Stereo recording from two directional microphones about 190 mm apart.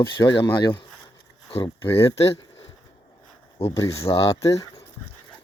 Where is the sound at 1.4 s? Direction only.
30° left (ahead or behind).